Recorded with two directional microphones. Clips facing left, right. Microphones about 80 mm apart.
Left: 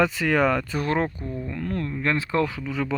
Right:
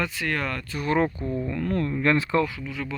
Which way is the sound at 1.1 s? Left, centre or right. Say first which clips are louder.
Right 4 dB; right.